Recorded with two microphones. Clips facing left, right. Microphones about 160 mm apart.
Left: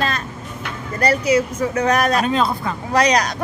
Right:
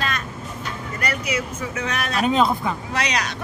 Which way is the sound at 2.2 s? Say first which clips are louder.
Even; 15° right (ahead or behind).